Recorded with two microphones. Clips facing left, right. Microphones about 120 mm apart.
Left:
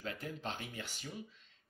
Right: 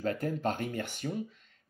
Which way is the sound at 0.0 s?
45° right (ahead or behind).